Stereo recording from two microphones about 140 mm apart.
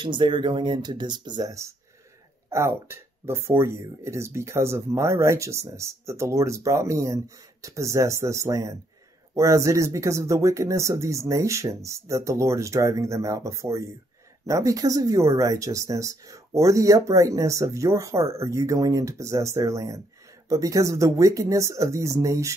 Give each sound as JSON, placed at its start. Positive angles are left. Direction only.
{"t": 0.0, "sound": "speech", "side_deg": -35}